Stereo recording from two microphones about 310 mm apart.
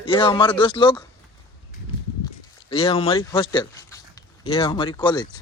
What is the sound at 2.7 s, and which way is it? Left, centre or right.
Speech, centre.